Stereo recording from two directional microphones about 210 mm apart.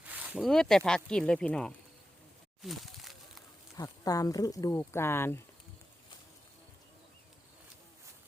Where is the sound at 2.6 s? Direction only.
Centre (ahead or behind).